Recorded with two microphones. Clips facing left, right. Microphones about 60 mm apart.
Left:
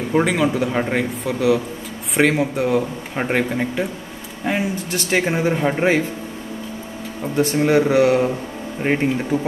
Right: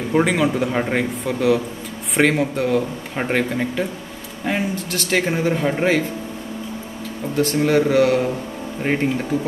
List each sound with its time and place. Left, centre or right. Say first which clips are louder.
0.1 s speech: even; centre
7.3 s speech: left 1 dB; centre